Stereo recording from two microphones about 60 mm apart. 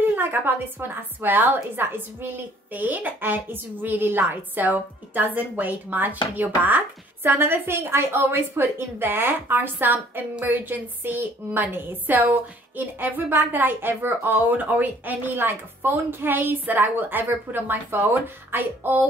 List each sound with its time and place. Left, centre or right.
0.1 s a woman's voice: right